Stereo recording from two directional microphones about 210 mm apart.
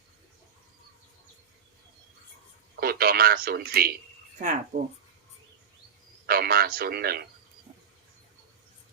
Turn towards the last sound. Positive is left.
turn(degrees=-45)  # may be behind; listen again after turning